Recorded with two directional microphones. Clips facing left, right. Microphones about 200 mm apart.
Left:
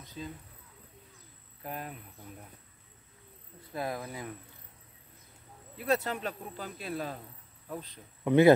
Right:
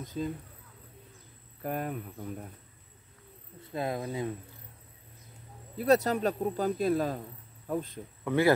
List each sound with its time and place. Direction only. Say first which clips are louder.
0.0 s speech: right 8 dB; 45° right (ahead or behind)
1.6 s speech: right 7 dB; 50° right (ahead or behind)
3.7 s speech: right 4 dB; 25° right (ahead or behind)
5.8 s speech: right 6 dB; 40° right (ahead or behind)
8.2 s speech: left 5 dB; 20° left (ahead or behind)